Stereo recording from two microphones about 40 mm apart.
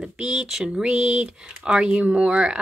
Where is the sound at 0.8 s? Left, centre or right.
Right.